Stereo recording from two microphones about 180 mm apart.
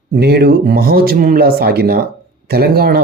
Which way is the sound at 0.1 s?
60° right (ahead or behind).